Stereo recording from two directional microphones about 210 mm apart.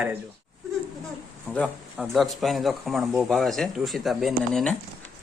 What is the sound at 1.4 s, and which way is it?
Speech, centre (ahead or behind).